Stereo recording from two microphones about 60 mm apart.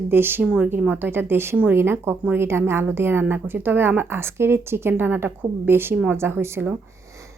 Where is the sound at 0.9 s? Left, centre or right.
Right.